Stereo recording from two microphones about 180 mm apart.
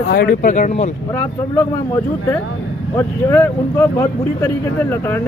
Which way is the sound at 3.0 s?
15° left (ahead or behind).